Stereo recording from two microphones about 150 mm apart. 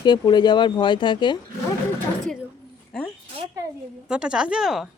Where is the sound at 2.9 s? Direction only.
5° left (ahead or behind).